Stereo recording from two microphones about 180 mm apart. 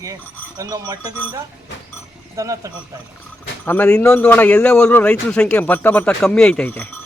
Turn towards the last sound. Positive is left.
turn(degrees=10)  # may be behind; listen again after turning